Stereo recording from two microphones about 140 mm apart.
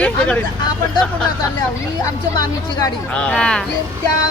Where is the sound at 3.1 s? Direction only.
5° left (ahead or behind).